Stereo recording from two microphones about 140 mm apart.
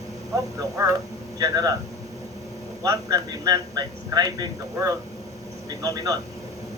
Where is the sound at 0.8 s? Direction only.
20° right (ahead or behind).